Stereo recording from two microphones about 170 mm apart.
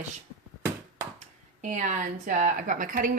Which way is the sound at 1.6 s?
50° right (ahead or behind).